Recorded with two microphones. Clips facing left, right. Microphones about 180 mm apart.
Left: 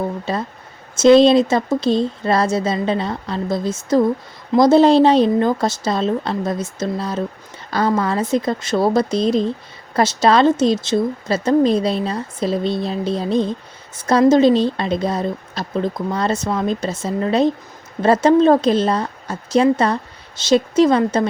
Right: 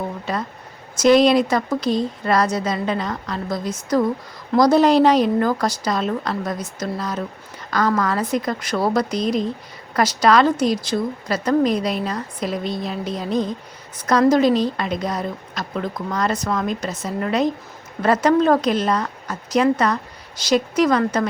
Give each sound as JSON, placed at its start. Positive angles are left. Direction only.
{"t": 0.3, "sound": "speech", "side_deg": 30}